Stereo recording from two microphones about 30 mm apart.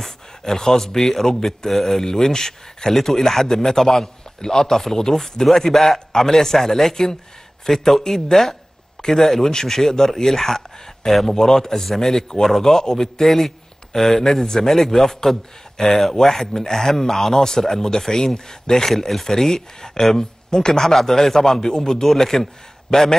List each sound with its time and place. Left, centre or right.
0.4 s speech: centre
11.3 s speech: centre
13.2 s speech: centre
18.9 s speech: centre
22.0 s a man's voice: centre